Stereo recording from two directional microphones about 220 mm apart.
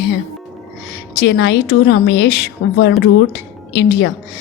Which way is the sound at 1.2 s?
55° left (ahead or behind).